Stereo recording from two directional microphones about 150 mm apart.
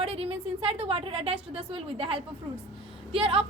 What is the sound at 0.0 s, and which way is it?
A woman's voice, 40° right (ahead or behind).